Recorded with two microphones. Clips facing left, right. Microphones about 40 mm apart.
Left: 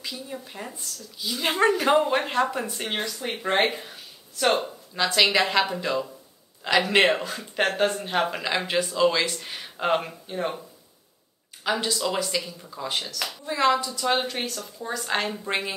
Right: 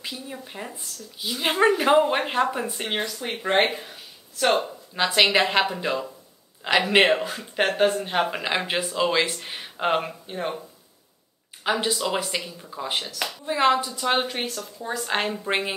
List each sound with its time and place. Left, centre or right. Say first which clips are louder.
0.3 s speech: even; centre
4.9 s a woman's voice: right 1 dB; centre
8.4 s speech: even; centre
11.6 s a woman's voice: right 1 dB; right